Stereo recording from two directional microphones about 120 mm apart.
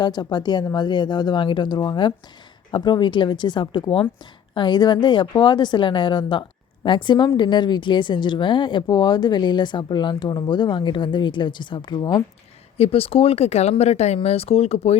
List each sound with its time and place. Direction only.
0.0 s a woman's voice: 35° left (ahead or behind)
12.7 s speech: 55° left (ahead or behind)